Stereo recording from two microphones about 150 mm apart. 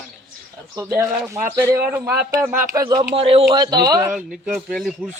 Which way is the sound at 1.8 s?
15° right (ahead or behind).